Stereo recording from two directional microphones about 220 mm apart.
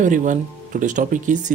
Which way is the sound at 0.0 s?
35° right (ahead or behind).